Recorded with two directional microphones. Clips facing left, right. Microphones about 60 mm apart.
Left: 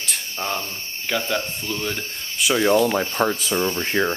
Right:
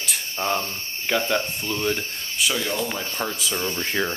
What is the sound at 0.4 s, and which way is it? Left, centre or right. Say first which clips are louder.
Speech: right 3 dB; centre.